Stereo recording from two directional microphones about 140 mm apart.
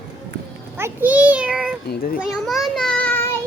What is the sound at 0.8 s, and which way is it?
A child's voice, 15° right (ahead or behind).